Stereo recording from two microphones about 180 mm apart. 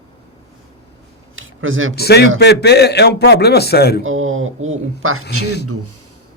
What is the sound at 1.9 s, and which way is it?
A man's voice, 65° left (ahead or behind).